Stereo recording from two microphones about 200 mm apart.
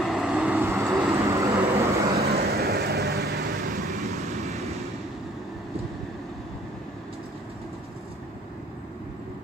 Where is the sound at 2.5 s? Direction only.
50° right (ahead or behind).